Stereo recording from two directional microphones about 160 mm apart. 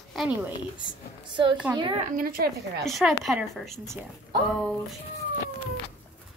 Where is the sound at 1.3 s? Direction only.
30° right (ahead or behind).